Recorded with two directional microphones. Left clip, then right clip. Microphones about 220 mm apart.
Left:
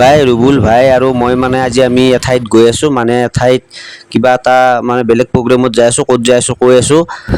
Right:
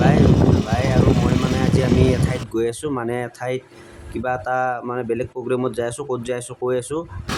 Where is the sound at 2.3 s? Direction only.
40° left (ahead or behind).